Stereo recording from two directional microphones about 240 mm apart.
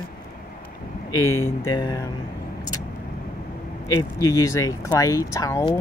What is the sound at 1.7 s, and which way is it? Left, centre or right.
Speech, centre.